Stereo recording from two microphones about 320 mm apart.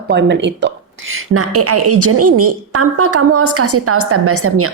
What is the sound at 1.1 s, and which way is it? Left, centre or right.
A woman's voice, right.